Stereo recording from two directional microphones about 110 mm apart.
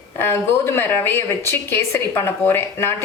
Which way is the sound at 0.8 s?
20° left (ahead or behind).